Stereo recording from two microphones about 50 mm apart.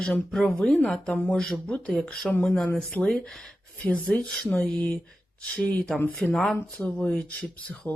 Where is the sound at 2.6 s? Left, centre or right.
Left.